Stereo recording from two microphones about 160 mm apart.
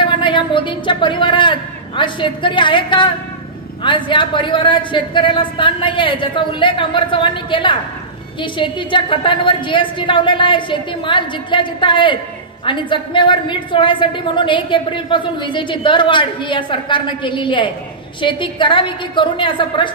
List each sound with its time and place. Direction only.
0.0 s a woman's voice: 30° left (ahead or behind)